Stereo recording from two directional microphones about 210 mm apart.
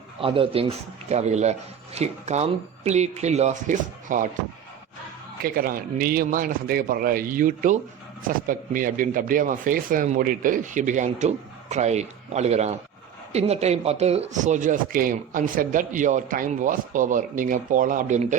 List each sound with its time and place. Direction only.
0.2 s speech: 25° right (ahead or behind)
5.4 s a man's voice: 45° right (ahead or behind)